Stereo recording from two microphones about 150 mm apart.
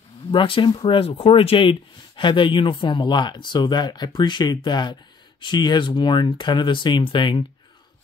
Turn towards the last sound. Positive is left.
turn(degrees=35)  # may be behind; listen again after turning